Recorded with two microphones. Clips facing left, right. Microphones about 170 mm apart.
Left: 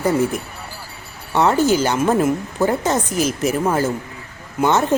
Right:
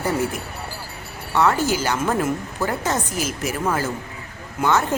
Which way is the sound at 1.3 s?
25° left (ahead or behind).